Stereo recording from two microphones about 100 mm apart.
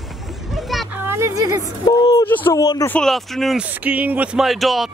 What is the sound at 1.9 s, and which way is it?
Speech, 40° left (ahead or behind).